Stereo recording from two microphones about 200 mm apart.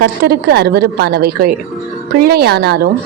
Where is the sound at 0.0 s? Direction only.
55° right (ahead or behind).